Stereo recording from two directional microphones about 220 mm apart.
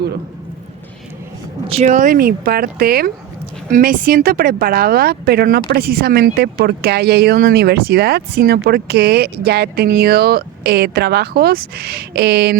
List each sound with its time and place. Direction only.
1.6 s speech: 30° right (ahead or behind); by 12.5 s 45° right (ahead or behind)